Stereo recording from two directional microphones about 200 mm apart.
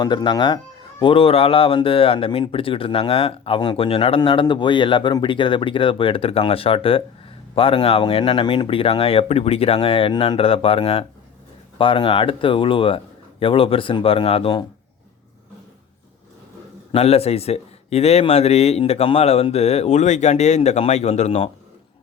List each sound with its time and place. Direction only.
0.0 s speech: 20° left (ahead or behind)
16.9 s a man's voice: 30° left (ahead or behind)